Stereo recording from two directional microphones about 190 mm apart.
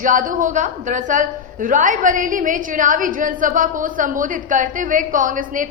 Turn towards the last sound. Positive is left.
turn(degrees=-45)  # may be behind; listen again after turning